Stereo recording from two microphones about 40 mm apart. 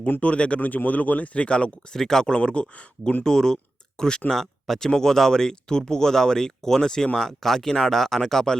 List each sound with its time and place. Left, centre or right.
0.2 s speech: left
0.6 s speech: left
1.9 s speech: centre
3.2 s speech: centre
4.6 s speech: centre